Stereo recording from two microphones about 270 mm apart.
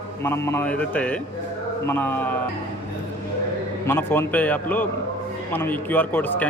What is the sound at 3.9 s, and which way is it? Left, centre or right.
Speech, centre.